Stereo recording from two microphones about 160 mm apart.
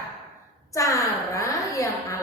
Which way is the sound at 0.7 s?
20° left (ahead or behind).